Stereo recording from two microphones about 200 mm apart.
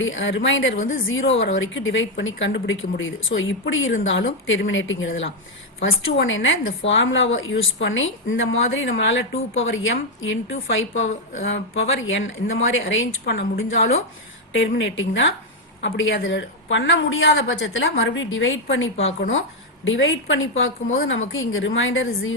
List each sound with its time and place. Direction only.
0.0 s a woman's voice: 70° left (ahead or behind)